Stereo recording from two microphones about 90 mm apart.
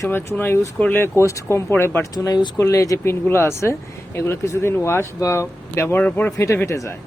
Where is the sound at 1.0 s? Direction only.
35° left (ahead or behind).